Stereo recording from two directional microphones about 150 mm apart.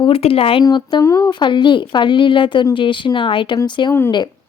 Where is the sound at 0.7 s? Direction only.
30° left (ahead or behind).